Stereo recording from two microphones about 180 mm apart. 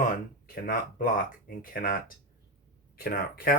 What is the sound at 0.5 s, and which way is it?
Speech, 50° left (ahead or behind).